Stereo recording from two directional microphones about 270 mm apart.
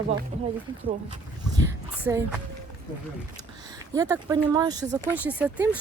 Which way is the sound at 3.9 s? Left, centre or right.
Centre.